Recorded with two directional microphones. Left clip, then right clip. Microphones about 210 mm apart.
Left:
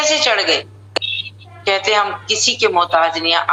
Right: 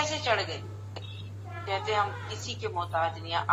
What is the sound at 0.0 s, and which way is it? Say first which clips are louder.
A woman's voice: left 14 dB; 50° left (ahead or behind).